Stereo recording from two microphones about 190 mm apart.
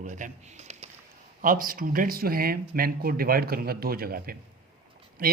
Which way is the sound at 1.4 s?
45° right (ahead or behind).